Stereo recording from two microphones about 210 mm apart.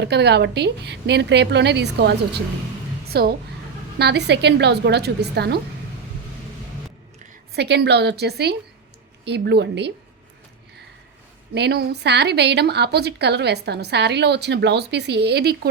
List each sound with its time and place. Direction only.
0.0 s a woman's voice: 50° right (ahead or behind)
7.5 s a woman's voice: 50° right (ahead or behind)
11.5 s a woman's voice: 50° right (ahead or behind)